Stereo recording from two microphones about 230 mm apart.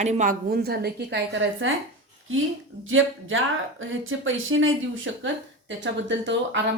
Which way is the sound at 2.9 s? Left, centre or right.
Right.